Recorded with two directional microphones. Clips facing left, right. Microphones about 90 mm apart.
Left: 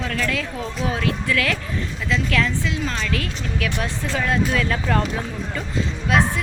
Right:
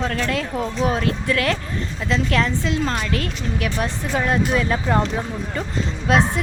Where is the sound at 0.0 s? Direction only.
35° right (ahead or behind).